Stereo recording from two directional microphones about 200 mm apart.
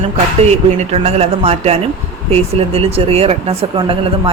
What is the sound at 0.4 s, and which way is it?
Speech, 30° right (ahead or behind).